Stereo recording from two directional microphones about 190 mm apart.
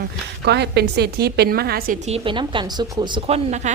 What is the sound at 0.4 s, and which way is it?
A woman's voice, 60° right (ahead or behind).